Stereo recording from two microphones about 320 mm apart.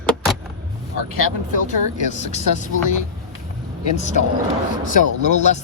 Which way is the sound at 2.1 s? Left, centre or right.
Left.